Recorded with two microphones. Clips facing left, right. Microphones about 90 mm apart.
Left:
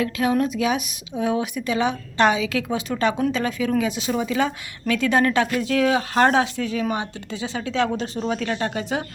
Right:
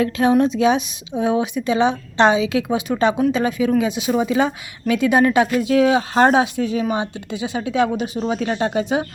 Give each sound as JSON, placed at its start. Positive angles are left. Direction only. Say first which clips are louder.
{"t": 0.0, "sound": "speech", "louder": "right 5 dB", "side_deg": -30}